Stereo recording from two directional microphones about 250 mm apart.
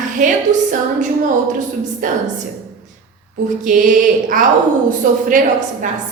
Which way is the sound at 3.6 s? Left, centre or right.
Right.